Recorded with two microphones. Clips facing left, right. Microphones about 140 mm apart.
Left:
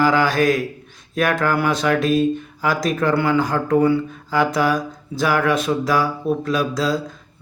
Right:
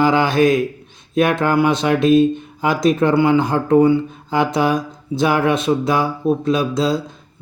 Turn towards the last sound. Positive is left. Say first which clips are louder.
# right 3 dB
turn(degrees=-25)  # may be behind; listen again after turning